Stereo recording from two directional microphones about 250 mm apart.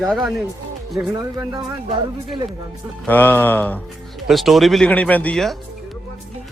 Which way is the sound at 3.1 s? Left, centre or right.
Centre.